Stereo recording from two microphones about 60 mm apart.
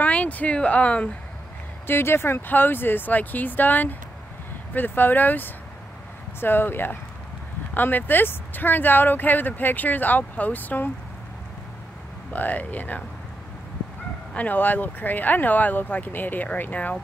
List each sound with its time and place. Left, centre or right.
0.0 s speech: left
1.9 s speech: left
12.3 s speech: left
14.3 s speech: left